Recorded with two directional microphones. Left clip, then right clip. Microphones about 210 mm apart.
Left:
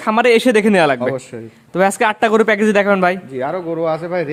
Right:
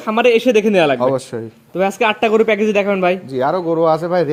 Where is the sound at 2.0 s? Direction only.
25° left (ahead or behind).